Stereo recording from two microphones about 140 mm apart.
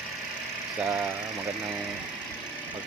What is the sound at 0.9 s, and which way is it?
Speech, 15° right (ahead or behind).